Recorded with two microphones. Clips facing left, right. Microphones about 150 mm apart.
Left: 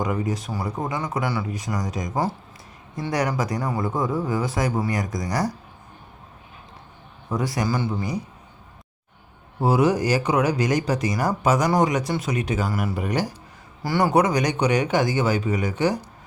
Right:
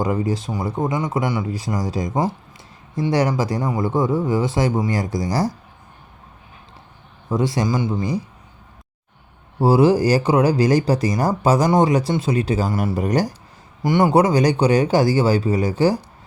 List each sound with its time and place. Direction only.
0.0 s speech: 30° right (ahead or behind)
1.5 s speech: 30° right (ahead or behind)
7.3 s speech: 25° right (ahead or behind)
9.6 s speech: 30° right (ahead or behind)
13.0 s speech: 40° right (ahead or behind)
13.8 s speech: 20° right (ahead or behind)